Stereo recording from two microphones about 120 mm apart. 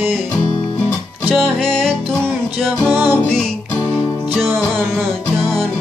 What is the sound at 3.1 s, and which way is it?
Music, 5° left (ahead or behind).